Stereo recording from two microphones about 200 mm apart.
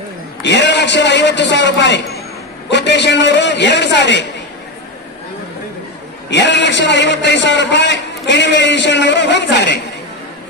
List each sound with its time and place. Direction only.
0.4 s a man's voice: 60° left (ahead or behind)
6.3 s a man's voice: 60° left (ahead or behind)